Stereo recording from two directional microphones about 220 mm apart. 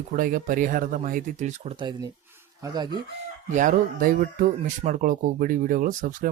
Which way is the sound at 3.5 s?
35° right (ahead or behind).